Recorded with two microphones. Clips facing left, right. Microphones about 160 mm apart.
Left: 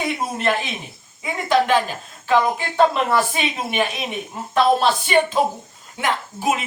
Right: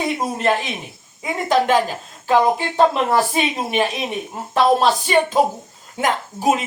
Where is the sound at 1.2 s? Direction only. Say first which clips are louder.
Right 1 dB; 40° right (ahead or behind).